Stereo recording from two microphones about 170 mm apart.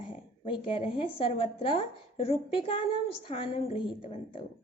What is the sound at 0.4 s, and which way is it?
A woman's voice, 30° left (ahead or behind).